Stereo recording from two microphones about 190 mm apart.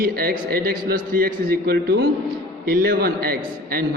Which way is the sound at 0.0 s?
50° right (ahead or behind).